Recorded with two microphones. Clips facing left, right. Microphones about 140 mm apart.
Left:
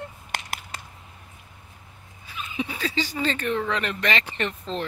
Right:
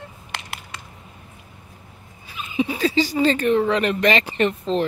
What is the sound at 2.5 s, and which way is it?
Speech, 10° right (ahead or behind).